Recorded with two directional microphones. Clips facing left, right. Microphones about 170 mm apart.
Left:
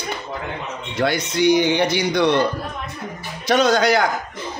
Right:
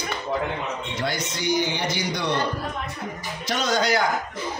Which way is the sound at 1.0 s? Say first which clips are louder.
Left 11 dB; 65° left (ahead or behind).